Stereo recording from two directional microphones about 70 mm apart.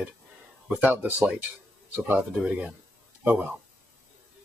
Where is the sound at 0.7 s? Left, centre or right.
Right.